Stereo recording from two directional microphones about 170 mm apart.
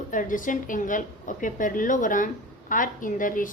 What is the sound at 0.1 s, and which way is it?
A woman's voice, 50° left (ahead or behind).